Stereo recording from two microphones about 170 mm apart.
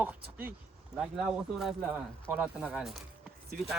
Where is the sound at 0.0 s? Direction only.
10° right (ahead or behind).